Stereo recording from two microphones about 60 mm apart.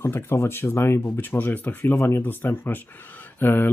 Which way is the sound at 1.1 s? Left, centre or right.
Left.